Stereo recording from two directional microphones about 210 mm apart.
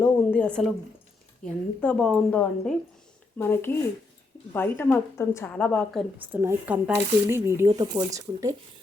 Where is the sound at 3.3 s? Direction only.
10° left (ahead or behind).